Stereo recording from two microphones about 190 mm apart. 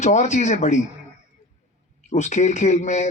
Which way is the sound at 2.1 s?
40° left (ahead or behind).